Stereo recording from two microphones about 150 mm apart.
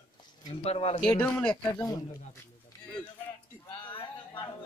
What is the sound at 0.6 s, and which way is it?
Speech, 45° left (ahead or behind).